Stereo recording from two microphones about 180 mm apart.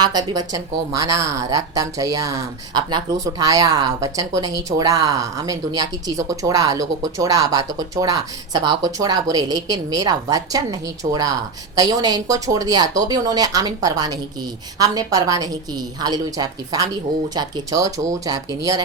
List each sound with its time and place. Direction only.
0.0 s a woman's voice: 25° right (ahead or behind)